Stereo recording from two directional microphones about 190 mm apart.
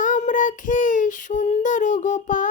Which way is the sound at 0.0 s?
40° left (ahead or behind).